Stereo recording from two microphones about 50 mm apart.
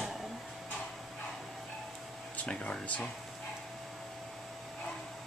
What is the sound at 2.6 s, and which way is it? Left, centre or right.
Speech, left.